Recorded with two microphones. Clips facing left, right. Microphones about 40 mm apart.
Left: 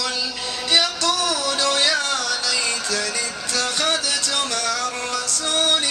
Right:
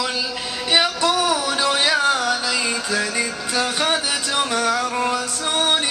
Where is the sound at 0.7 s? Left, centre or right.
Centre.